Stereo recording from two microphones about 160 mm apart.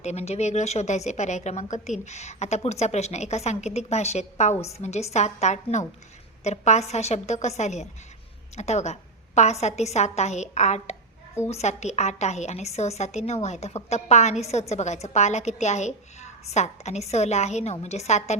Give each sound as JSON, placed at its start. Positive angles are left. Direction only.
{"t": 0.0, "sound": "a woman's voice", "side_deg": 45}